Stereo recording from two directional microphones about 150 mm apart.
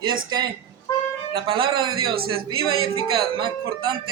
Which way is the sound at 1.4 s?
35° right (ahead or behind).